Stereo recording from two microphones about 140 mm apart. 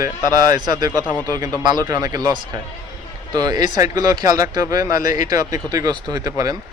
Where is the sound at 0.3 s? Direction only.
25° right (ahead or behind).